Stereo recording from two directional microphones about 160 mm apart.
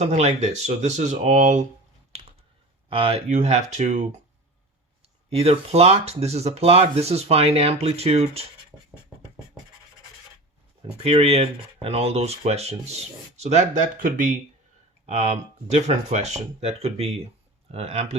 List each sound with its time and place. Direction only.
0.0 s speech: 45° right (ahead or behind)
2.9 s speech: 35° right (ahead or behind)
5.3 s speech: 40° right (ahead or behind)
11.0 s speech: 40° right (ahead or behind); by 14.3 s 55° right (ahead or behind)
15.0 s speech: 40° right (ahead or behind)